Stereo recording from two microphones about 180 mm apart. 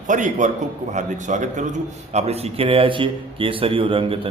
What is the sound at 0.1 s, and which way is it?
Speech, 45° right (ahead or behind).